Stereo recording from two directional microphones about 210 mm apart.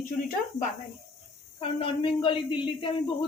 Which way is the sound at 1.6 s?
25° left (ahead or behind).